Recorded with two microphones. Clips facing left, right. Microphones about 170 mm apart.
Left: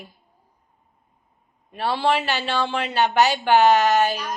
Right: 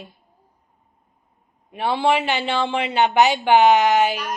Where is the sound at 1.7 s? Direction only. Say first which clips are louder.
Right 2 dB; 15° right (ahead or behind).